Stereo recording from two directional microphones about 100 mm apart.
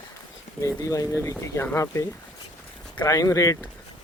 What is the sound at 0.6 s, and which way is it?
Speech, 35° left (ahead or behind).